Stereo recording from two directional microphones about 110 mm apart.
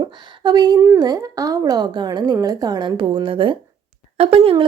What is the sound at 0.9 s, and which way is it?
A woman's voice, 35° right (ahead or behind).